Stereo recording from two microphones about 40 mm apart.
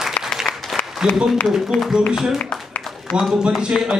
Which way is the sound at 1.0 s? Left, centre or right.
Centre.